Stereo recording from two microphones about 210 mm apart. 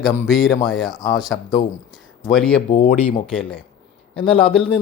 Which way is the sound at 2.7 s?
35° left (ahead or behind).